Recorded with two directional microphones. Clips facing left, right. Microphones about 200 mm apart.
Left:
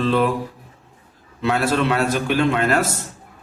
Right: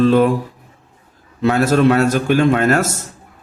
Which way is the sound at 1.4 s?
45° right (ahead or behind).